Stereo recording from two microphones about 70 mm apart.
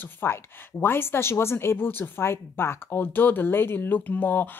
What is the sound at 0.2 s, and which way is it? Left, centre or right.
A woman's voice, left.